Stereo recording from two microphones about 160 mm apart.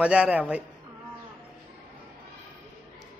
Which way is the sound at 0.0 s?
5° right (ahead or behind).